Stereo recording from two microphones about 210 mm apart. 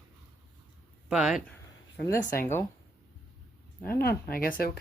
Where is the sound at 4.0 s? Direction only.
45° left (ahead or behind).